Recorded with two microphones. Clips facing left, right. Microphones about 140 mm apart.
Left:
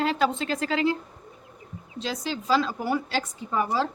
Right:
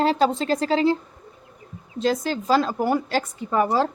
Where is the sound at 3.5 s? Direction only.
75° right (ahead or behind).